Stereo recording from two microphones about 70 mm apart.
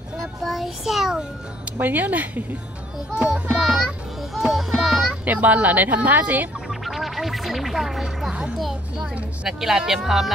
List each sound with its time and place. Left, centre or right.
0.4 s child singing: centre
1.8 s speech: right
3.4 s speech: centre
4.4 s music: centre
5.2 s speech: right
6.7 s speech: centre
8.3 s speech: centre